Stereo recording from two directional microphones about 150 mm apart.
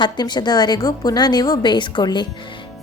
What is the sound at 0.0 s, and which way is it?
A woman's voice, 30° left (ahead or behind).